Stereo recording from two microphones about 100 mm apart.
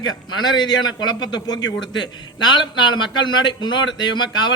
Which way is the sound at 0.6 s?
45° left (ahead or behind).